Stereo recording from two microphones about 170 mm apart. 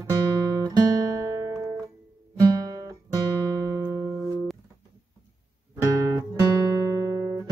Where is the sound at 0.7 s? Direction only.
20° right (ahead or behind).